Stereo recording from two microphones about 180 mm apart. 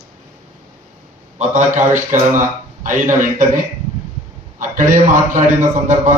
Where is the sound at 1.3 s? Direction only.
40° right (ahead or behind).